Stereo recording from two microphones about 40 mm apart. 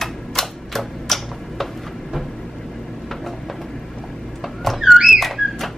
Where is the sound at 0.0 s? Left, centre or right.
Centre.